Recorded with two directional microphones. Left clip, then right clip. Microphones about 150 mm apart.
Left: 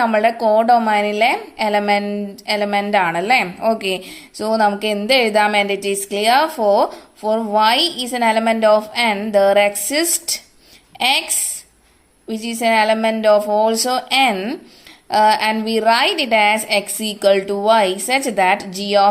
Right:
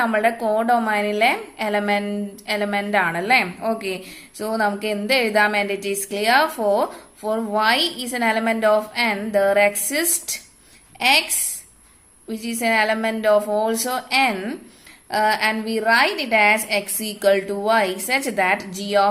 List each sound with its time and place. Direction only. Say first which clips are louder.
0.0 s a woman's voice: left 4 dB; 25° left (ahead or behind)